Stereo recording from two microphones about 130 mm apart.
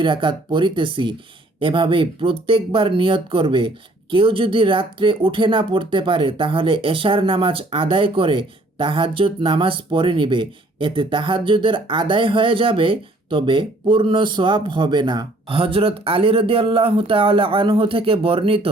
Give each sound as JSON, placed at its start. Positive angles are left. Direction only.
{"t": 0.0, "sound": "speech", "side_deg": -40}